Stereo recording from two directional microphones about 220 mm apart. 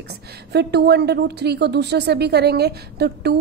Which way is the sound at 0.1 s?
50° right (ahead or behind).